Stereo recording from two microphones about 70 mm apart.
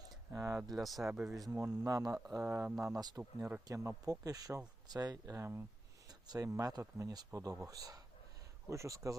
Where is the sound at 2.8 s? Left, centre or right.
Right.